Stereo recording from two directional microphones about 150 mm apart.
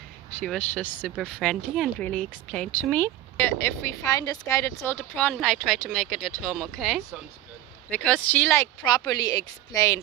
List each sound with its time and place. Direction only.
0.3 s speech: 10° left (ahead or behind)
8.9 s a woman's voice: 25° left (ahead or behind)